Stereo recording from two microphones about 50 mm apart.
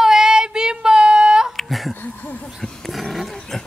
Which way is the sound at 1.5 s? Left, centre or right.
Centre.